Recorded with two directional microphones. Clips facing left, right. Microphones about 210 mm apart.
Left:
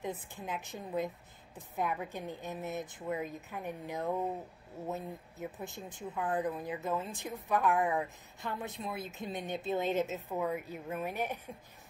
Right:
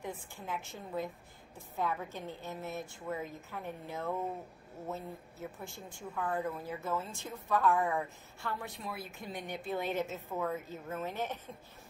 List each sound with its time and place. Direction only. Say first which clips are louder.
0.0 s speech: left 3 dB; 20° left (ahead or behind)